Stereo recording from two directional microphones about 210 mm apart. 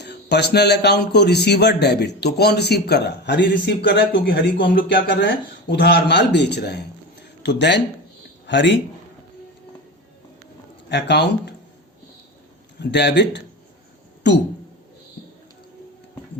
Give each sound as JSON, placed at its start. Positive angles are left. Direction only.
{"t": 0.0, "sound": "a man's voice", "side_deg": 55}
{"t": 10.8, "sound": "speech", "side_deg": 55}
{"t": 12.8, "sound": "speech", "side_deg": 55}